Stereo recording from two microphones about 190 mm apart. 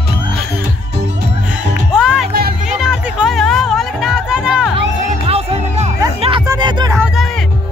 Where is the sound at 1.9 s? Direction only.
5° right (ahead or behind).